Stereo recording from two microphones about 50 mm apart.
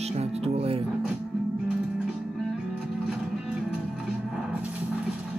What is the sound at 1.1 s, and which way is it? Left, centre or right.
Music, centre.